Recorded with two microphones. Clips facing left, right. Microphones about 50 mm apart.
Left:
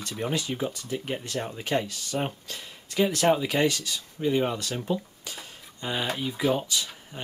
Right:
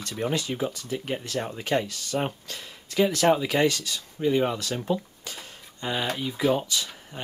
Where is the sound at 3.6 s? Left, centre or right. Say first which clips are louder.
Right 1 dB; left.